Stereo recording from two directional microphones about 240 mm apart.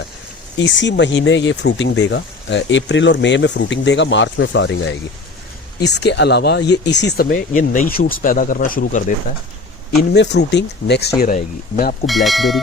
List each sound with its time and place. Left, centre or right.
0.6 s speech: left
10.0 s speech: left
12.0 s speech: centre